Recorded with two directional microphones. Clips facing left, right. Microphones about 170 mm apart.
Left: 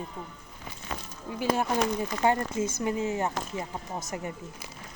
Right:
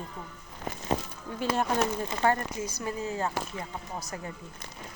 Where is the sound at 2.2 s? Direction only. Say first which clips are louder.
Left 2 dB; 25° left (ahead or behind).